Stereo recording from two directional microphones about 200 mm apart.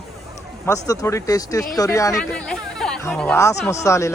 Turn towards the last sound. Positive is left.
turn(degrees=15)  # may be behind; listen again after turning